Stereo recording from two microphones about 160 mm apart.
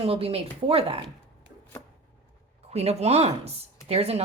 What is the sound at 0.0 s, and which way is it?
Speech, 35° right (ahead or behind).